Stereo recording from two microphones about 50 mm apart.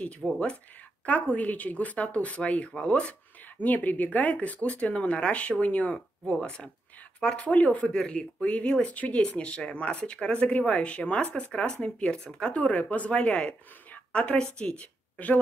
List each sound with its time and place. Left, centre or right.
0.2 s speech: left
7.9 s speech: centre
12.5 s speech: left